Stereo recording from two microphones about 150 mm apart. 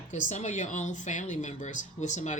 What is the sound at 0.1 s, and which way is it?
Speech, 50° left (ahead or behind).